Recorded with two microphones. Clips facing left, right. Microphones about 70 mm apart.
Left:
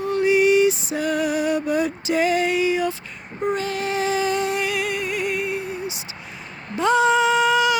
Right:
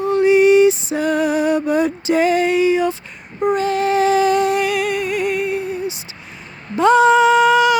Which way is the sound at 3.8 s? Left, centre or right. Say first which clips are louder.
Right 8 dB; right.